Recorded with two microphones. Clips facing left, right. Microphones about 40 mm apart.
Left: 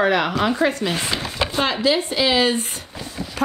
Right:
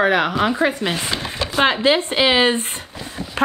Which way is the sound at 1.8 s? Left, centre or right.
Right.